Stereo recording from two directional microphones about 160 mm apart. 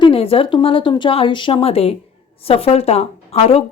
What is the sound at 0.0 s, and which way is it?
A woman's voice, 35° left (ahead or behind).